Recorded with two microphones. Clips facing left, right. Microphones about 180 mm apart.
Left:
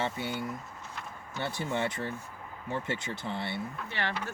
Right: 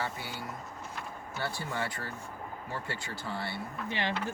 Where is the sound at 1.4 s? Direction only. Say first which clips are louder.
Left 4 dB; 20° left (ahead or behind).